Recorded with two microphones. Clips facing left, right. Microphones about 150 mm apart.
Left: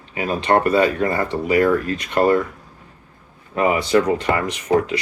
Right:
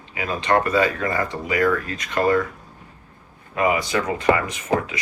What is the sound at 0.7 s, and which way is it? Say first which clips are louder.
Speech: left 4 dB; 30° left (ahead or behind).